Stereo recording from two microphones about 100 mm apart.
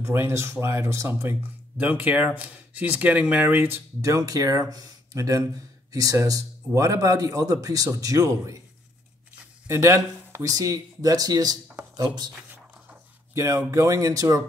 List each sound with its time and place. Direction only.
0.0 s speech: 25° right (ahead or behind)
4.0 s a man's voice: 35° right (ahead or behind)
9.7 s a man's voice: 30° right (ahead or behind)
13.3 s a man's voice: 30° right (ahead or behind)